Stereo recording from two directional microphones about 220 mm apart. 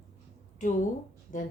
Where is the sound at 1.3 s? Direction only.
35° left (ahead or behind).